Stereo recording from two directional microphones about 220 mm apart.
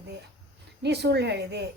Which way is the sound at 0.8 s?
50° right (ahead or behind).